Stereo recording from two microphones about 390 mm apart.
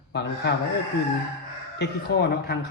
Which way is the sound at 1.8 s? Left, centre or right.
Left.